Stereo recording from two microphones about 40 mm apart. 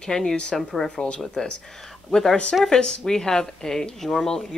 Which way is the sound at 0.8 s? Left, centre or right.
Left.